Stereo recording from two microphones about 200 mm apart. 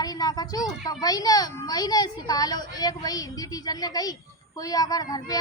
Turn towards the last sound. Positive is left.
turn(degrees=20)  # may be behind; listen again after turning